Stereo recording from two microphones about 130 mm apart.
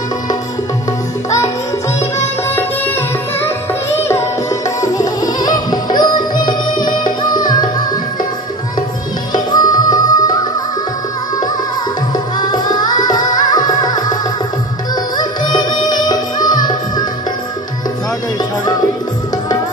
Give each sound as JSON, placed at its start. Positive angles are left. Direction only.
{"t": 2.0, "sound": "music", "side_deg": 20}
{"t": 9.3, "sound": "music", "side_deg": 30}
{"t": 12.4, "sound": "music", "side_deg": 30}
{"t": 15.1, "sound": "music", "side_deg": 30}